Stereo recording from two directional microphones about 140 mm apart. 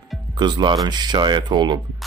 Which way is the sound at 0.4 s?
30° right (ahead or behind).